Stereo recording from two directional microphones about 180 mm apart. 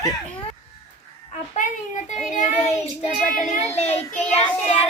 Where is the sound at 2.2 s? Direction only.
40° left (ahead or behind).